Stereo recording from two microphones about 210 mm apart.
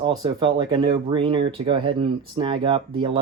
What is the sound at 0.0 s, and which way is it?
Speech, 20° right (ahead or behind).